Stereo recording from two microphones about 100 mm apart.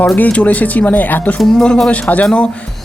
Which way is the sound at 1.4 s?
Centre (ahead or behind).